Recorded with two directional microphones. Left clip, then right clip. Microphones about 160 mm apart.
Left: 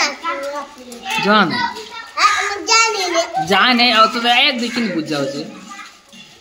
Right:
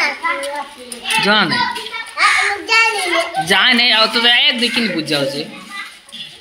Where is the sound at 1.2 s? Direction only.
15° left (ahead or behind).